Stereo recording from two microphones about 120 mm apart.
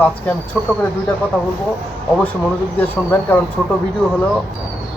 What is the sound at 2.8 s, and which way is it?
Speech, 15° left (ahead or behind).